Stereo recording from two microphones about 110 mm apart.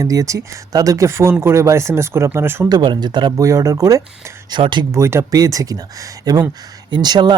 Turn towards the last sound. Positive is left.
turn(degrees=-40)  # may be behind; listen again after turning